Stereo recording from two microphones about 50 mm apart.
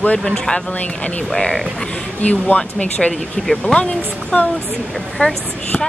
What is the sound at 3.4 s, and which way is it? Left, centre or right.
Speech, centre.